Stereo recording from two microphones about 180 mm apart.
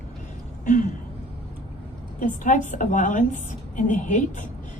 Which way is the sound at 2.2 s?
45° left (ahead or behind).